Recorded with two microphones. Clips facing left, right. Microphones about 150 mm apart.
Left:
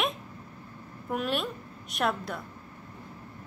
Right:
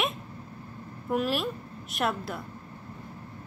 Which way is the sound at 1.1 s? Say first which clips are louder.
Right 3 dB; centre (ahead or behind).